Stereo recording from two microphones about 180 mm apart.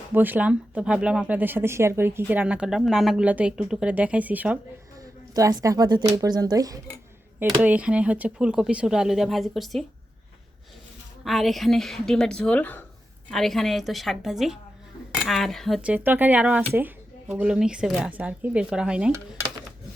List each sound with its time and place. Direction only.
0.1 s speech: 10° right (ahead or behind)
5.3 s a woman's voice: 20° right (ahead or behind)
7.3 s speech: 10° right (ahead or behind)
11.2 s speech: centre (ahead or behind)